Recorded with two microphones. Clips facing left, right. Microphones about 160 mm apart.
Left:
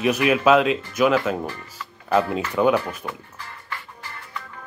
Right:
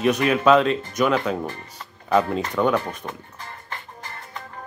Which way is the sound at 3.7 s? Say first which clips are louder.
Left 1 dB; 45° right (ahead or behind).